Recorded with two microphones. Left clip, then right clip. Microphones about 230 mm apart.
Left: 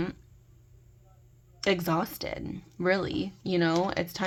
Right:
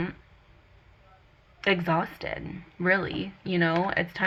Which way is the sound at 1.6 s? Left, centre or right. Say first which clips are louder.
Right 2 dB; left.